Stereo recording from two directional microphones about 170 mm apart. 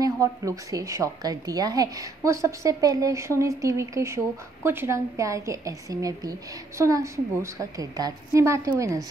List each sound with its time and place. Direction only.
0.0 s a woman's voice: 20° right (ahead or behind)